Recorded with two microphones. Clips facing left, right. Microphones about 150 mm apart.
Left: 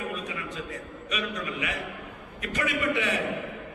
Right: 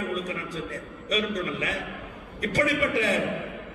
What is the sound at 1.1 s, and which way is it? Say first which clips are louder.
A man's voice: right 5 dB; 35° right (ahead or behind).